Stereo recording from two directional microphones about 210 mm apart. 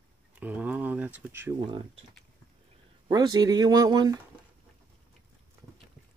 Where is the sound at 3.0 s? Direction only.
20° right (ahead or behind).